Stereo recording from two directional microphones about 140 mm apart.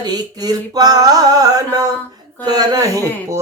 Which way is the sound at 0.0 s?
30° right (ahead or behind).